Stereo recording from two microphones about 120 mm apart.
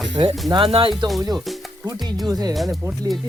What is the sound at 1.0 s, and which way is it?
Speech, centre (ahead or behind).